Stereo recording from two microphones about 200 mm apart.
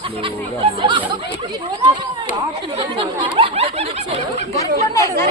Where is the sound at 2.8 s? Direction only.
25° right (ahead or behind).